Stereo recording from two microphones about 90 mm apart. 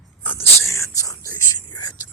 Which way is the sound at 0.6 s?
35° left (ahead or behind).